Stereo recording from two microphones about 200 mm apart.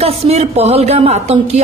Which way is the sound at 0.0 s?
30° right (ahead or behind).